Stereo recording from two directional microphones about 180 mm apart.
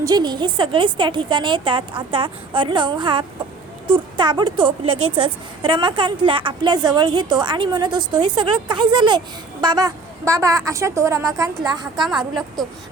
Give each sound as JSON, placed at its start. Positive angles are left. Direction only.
{"t": 0.0, "sound": "a woman's voice", "side_deg": -20}
{"t": 11.9, "sound": "a woman's voice", "side_deg": 0}